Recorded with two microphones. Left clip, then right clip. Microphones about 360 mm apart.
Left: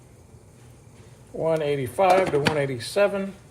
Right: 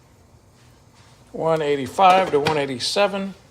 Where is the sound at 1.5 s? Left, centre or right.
Centre.